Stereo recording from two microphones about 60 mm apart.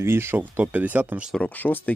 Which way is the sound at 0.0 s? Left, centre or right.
Right.